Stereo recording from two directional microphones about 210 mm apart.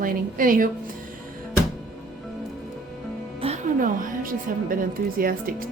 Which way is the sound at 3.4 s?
35° right (ahead or behind).